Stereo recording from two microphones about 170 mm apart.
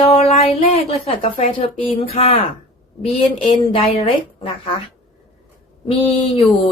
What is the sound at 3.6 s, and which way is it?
Speech, 35° left (ahead or behind).